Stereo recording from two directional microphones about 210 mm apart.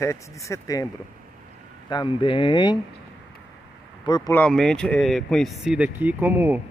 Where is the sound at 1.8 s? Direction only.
20° left (ahead or behind).